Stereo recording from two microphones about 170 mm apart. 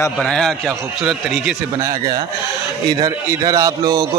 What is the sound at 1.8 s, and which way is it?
A man's voice, 20° right (ahead or behind).